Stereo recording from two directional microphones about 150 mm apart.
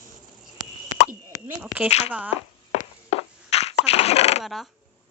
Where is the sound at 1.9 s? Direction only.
45° left (ahead or behind).